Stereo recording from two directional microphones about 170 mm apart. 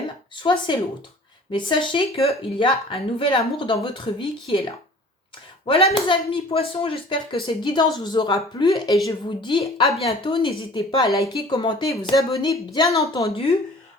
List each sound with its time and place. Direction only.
0.3 s speech: 30° left (ahead or behind)
5.6 s speech: 30° left (ahead or behind)
13.2 s speech: 35° left (ahead or behind)